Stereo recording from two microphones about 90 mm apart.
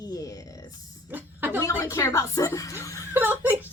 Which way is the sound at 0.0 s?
40° left (ahead or behind).